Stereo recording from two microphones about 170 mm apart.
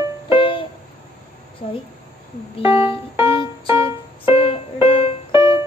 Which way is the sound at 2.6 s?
30° left (ahead or behind).